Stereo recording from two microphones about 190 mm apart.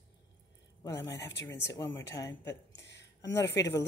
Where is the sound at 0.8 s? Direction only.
15° left (ahead or behind).